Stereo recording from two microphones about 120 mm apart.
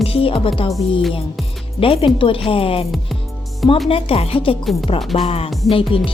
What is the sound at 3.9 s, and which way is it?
A woman's voice, 55° left (ahead or behind).